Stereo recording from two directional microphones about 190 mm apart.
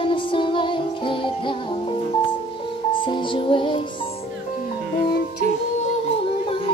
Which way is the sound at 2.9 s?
25° left (ahead or behind).